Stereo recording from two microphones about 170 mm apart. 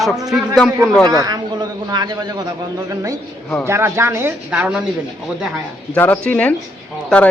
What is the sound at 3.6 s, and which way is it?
A man's voice, 15° right (ahead or behind).